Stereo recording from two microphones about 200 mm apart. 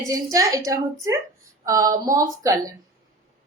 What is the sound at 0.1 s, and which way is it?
A woman's voice, 15° right (ahead or behind).